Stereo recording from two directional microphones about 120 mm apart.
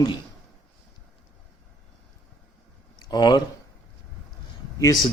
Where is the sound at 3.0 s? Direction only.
40° left (ahead or behind).